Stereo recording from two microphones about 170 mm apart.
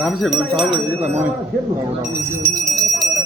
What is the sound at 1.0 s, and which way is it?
Jingle bell, 10° right (ahead or behind).